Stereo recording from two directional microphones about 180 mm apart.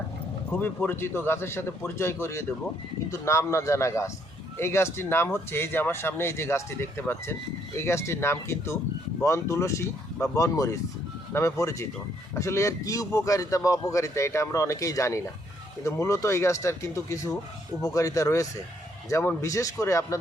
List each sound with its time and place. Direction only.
0.5 s a man's voice: 10° left (ahead or behind)